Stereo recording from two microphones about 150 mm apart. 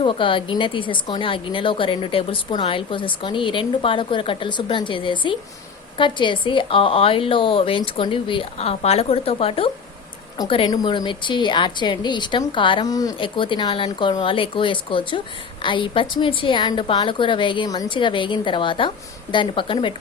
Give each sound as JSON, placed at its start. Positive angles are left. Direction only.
{"t": 0.0, "sound": "a woman's voice", "side_deg": 35}